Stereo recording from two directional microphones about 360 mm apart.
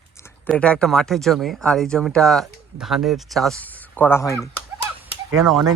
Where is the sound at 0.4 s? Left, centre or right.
Centre.